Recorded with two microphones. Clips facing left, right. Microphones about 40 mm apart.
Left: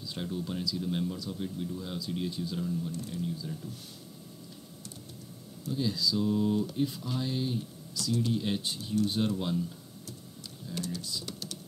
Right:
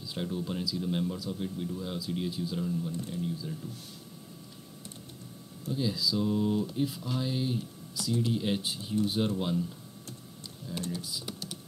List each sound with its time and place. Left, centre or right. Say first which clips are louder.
0.0 s speech: right 1 dB; centre
2.9 s speech: right 1 dB; right
3.3 s speech: right 1 dB; centre
5.7 s speech: even; centre
10.9 s speech: right 1 dB; centre